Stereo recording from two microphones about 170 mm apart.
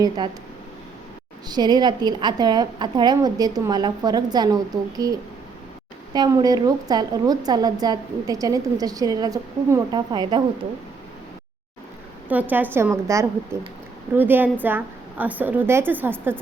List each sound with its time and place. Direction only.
1.5 s a woman's voice: 25° right (ahead or behind)
6.1 s a woman's voice: 20° right (ahead or behind)
12.3 s a woman's voice: 10° right (ahead or behind)